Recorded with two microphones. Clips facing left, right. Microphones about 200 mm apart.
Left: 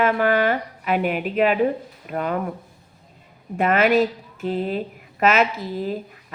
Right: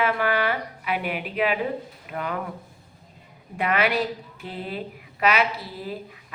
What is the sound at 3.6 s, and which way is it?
Speech, 45° left (ahead or behind).